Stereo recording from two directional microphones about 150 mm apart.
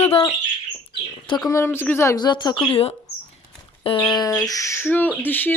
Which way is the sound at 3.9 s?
30° left (ahead or behind).